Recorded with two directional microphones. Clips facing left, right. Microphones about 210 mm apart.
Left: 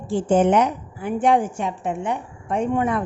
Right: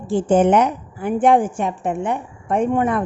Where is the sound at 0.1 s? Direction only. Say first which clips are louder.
Right 2 dB; 55° right (ahead or behind).